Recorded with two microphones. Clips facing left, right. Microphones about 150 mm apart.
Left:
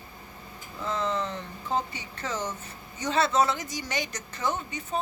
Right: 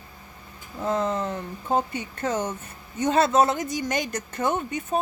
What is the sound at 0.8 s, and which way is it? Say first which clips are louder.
A woman's voice: right 4 dB; 45° right (ahead or behind).